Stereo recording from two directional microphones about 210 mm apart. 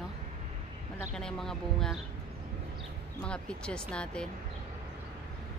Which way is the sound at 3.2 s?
5° left (ahead or behind).